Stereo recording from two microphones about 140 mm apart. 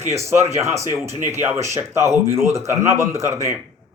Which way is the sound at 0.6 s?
20° right (ahead or behind).